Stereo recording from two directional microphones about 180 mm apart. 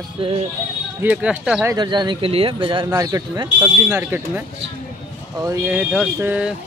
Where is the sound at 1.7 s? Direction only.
25° right (ahead or behind).